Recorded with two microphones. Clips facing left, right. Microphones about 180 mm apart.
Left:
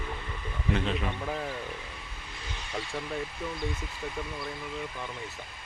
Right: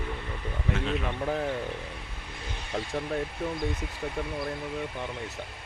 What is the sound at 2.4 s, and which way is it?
Vehicle, 55° right (ahead or behind).